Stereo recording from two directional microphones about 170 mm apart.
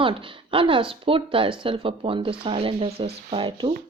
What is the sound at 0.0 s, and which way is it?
Speech, 30° right (ahead or behind).